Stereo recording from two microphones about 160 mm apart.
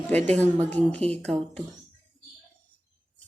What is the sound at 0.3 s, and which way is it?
Speech, 10° left (ahead or behind).